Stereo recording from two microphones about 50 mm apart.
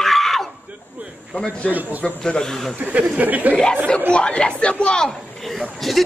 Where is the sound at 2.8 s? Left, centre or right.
Right.